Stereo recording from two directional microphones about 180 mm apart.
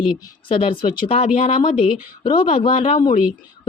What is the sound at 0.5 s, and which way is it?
Speech, 30° left (ahead or behind).